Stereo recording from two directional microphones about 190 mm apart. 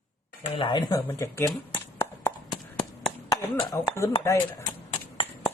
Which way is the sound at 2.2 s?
15° left (ahead or behind).